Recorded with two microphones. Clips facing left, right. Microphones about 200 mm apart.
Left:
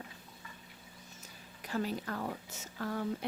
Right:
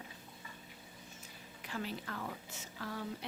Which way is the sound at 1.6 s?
40° left (ahead or behind).